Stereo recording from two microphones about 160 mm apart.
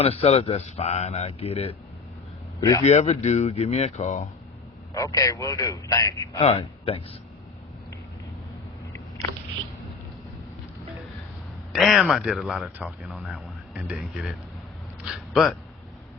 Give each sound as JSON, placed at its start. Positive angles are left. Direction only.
{"t": 0.0, "sound": "a man's voice", "side_deg": 35}
{"t": 2.6, "sound": "a man's voice", "side_deg": 20}
{"t": 2.8, "sound": "speech", "side_deg": 45}
{"t": 4.9, "sound": "speech", "side_deg": 20}
{"t": 6.4, "sound": "a man's voice", "side_deg": 35}
{"t": 11.7, "sound": "speech", "side_deg": 0}